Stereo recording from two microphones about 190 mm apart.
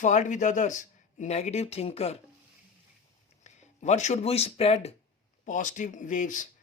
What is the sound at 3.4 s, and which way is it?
Speech, 35° left (ahead or behind).